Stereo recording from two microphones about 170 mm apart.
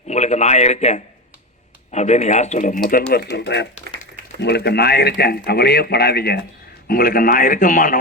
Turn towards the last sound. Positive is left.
turn(degrees=50)  # may be behind; listen again after turning